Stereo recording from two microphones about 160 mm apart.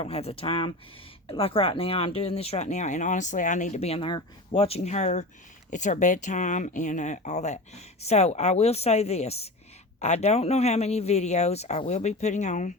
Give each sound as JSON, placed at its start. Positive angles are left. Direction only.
{"t": 0.0, "sound": "speech", "side_deg": 40}